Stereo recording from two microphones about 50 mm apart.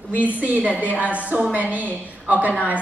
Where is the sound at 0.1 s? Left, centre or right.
Right.